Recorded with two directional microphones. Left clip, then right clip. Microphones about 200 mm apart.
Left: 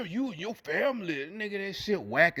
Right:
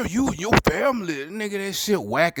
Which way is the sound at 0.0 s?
30° right (ahead or behind).